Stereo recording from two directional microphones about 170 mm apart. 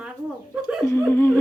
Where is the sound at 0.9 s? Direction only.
15° left (ahead or behind).